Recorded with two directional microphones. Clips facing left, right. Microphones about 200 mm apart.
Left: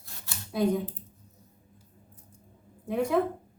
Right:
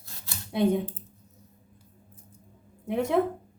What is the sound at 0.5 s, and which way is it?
Speech, 25° right (ahead or behind).